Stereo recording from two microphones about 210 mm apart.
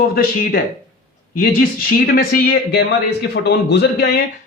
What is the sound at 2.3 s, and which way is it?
Speech, 45° left (ahead or behind).